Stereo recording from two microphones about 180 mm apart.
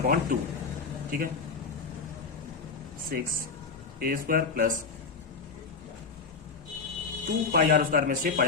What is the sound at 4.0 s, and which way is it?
Speech, 50° right (ahead or behind).